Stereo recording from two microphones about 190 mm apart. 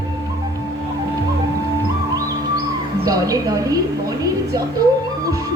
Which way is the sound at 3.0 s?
20° right (ahead or behind).